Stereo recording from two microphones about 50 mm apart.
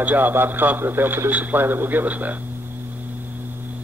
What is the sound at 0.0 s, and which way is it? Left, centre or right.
A man's voice, right.